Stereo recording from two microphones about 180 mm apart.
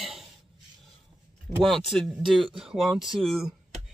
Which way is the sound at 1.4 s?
Centre (ahead or behind).